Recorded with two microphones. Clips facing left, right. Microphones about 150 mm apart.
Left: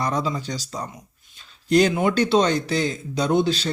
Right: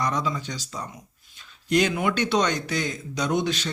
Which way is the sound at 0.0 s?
30° left (ahead or behind).